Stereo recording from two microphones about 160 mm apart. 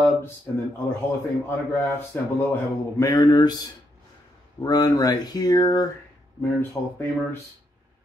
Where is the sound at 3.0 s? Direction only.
25° left (ahead or behind).